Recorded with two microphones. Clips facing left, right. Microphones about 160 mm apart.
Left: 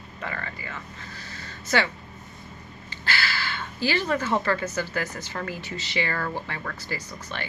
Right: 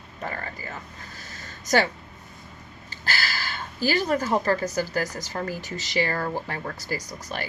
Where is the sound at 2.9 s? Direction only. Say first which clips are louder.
Left 1 dB; 40° right (ahead or behind).